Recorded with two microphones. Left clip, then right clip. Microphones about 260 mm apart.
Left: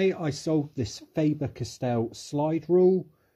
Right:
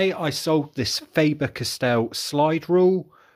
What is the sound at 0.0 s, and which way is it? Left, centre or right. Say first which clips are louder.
Speech: right 4 dB; centre.